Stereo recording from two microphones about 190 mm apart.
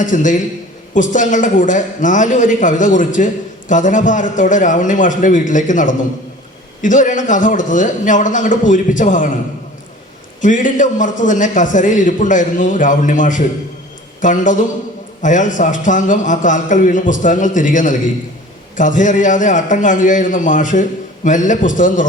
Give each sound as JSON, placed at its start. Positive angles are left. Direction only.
{"t": 0.0, "sound": "a man's voice", "side_deg": 40}
{"t": 10.4, "sound": "a man's voice", "side_deg": 40}